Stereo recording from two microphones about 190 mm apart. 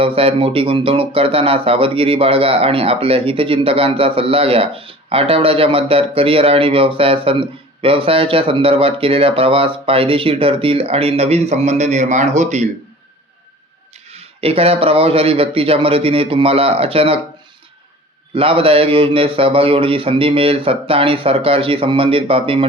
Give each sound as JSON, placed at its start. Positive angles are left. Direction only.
{"t": 0.0, "sound": "speech", "side_deg": -30}
{"t": 14.1, "sound": "speech", "side_deg": -30}
{"t": 18.3, "sound": "speech", "side_deg": -30}